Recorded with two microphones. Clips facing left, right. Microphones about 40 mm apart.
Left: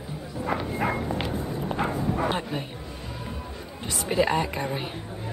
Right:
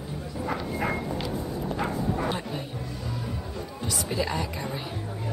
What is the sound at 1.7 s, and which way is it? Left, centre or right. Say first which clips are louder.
Bow-wow: left 2 dB; left.